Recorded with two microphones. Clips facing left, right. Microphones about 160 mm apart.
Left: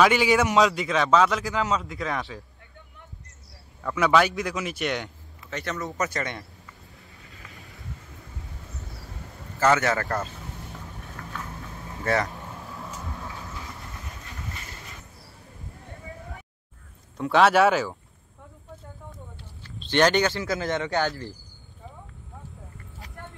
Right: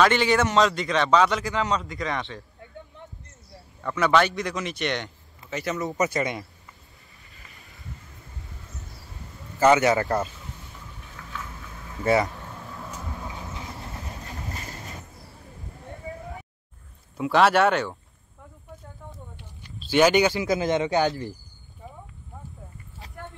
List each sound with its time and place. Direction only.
0.0 s a man's voice: 5° left (ahead or behind)
3.8 s a man's voice: 5° left (ahead or behind)
5.5 s speech: 5° right (ahead or behind)
7.2 s vehicle: 80° left
9.6 s speech: 15° right (ahead or behind)
11.3 s vehicle: 40° left (ahead or behind)
12.0 s speech: 15° right (ahead or behind)
12.7 s vehicle: centre (ahead or behind)
13.2 s vehicle: 20° right (ahead or behind); by 15.0 s 40° right (ahead or behind)
17.2 s a man's voice: centre (ahead or behind)
19.8 s speech: 5° right (ahead or behind)